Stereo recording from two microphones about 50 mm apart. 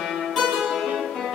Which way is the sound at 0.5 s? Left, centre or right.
Centre.